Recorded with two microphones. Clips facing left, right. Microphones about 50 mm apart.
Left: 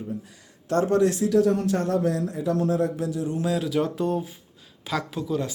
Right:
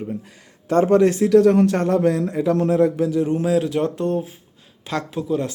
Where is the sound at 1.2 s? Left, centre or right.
Right.